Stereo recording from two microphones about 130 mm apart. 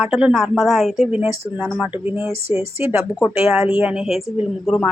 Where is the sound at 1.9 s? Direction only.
15° right (ahead or behind).